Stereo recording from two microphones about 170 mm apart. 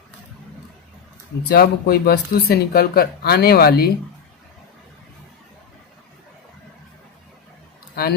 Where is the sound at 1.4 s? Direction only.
65° left (ahead or behind).